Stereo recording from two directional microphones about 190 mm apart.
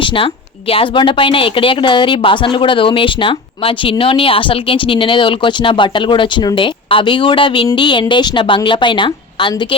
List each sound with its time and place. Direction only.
0.7 s a woman's voice: 25° left (ahead or behind)